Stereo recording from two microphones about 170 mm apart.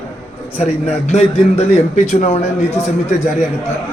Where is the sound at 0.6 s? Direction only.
40° left (ahead or behind).